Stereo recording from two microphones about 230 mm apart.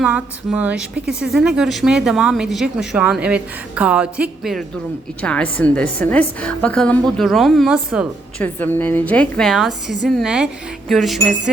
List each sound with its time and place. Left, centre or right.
0.0 s speech: centre
8.5 s speech: centre